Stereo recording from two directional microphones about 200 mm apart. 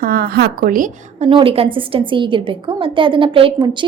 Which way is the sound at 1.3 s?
25° right (ahead or behind).